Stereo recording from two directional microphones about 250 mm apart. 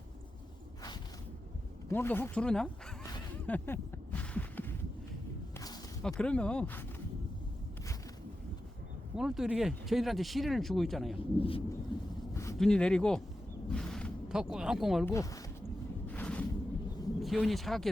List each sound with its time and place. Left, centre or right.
1.9 s speech: centre
3.1 s a sound: centre
5.5 s walk: centre
6.0 s speech: centre
9.1 s speech: centre
11.3 s speech: left
11.9 s a sound: centre
12.5 s speech: centre
13.7 s a sound: centre
15.1 s speech: centre
16.0 s a sound: centre
17.2 s speech: centre